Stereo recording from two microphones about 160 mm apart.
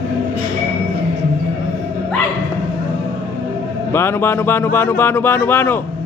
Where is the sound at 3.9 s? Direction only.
15° left (ahead or behind).